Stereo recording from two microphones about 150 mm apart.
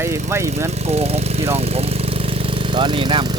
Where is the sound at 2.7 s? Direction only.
30° right (ahead or behind).